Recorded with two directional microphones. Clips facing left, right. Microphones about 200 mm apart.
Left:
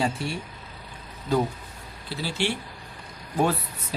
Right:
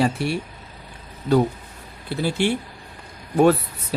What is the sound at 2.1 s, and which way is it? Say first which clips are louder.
Speech: right 7 dB; 50° right (ahead or behind).